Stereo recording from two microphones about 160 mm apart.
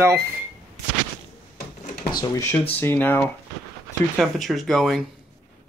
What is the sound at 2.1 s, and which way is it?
Speech, 20° left (ahead or behind).